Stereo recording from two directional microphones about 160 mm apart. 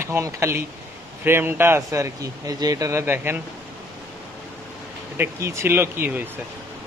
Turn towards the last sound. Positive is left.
turn(degrees=-10)  # may be behind; listen again after turning